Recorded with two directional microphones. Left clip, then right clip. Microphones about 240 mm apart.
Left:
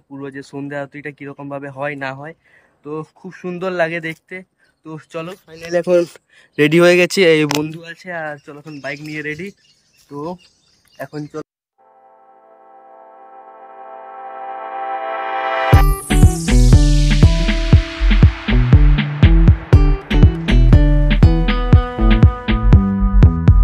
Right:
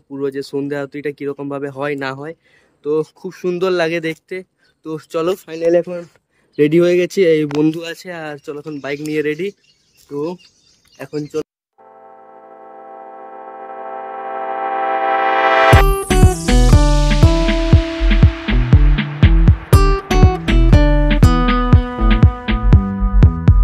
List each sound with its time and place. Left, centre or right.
0.1 s speech: centre
6.5 s speech: centre
7.7 s speech: right
8.0 s speech: centre
11.0 s speech: centre
12.0 s synthesizer: centre
21.1 s music: centre